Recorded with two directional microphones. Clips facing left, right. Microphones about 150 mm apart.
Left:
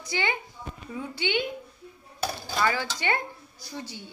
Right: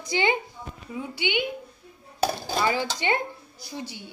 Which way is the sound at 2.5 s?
20° right (ahead or behind).